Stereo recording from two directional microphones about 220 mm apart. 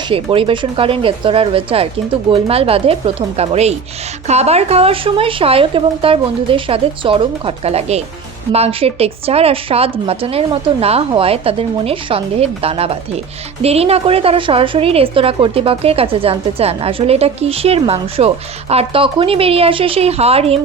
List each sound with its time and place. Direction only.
0.1 s a woman's voice: 25° right (ahead or behind)